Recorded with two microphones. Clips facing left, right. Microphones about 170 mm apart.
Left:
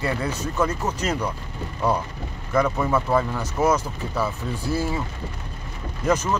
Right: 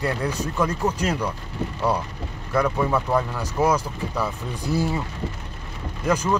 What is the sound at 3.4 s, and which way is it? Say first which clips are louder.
Speech: even; 10° right (ahead or behind).